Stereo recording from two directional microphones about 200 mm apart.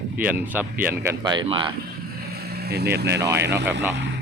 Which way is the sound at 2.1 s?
50° right (ahead or behind).